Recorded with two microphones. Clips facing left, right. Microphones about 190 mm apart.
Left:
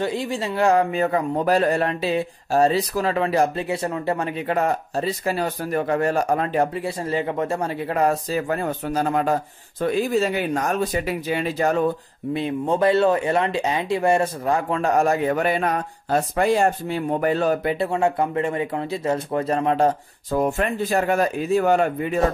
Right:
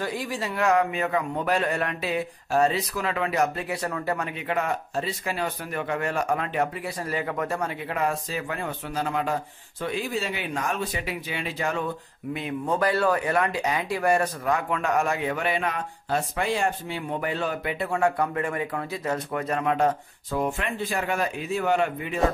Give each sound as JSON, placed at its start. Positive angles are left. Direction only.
{"t": 0.0, "sound": "speech", "side_deg": 25}
{"t": 7.8, "sound": "speech", "side_deg": 40}
{"t": 12.4, "sound": "speech", "side_deg": 30}
{"t": 17.7, "sound": "speech", "side_deg": 25}